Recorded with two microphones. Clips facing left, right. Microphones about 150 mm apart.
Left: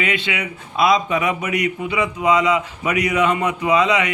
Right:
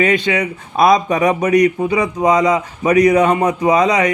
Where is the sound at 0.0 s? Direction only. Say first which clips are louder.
Right 8 dB; 40° right (ahead or behind).